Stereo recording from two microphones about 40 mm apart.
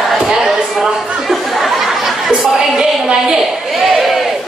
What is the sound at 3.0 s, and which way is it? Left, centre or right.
Speech, centre.